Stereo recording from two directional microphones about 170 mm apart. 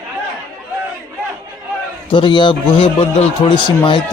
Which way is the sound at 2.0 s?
30° left (ahead or behind).